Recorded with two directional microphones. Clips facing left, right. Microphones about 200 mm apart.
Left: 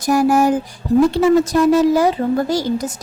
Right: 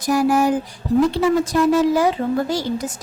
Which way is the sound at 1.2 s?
45° left (ahead or behind).